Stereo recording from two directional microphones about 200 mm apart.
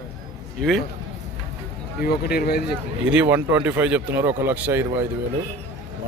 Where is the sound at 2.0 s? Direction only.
50° left (ahead or behind).